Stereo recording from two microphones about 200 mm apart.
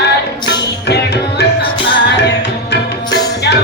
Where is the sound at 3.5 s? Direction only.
60° left (ahead or behind).